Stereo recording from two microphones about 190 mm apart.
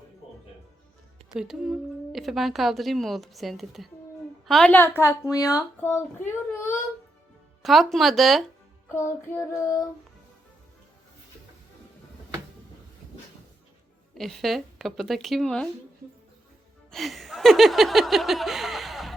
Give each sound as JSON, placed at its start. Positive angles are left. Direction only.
{"t": 1.3, "sound": "a woman's voice", "side_deg": -5}
{"t": 7.6, "sound": "a woman's voice", "side_deg": 0}
{"t": 9.0, "sound": "a child's voice", "side_deg": 15}
{"t": 14.2, "sound": "a woman's voice", "side_deg": 0}
{"t": 16.9, "sound": "chuckle", "side_deg": 0}